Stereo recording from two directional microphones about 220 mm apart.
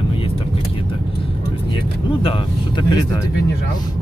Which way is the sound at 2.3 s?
20° left (ahead or behind).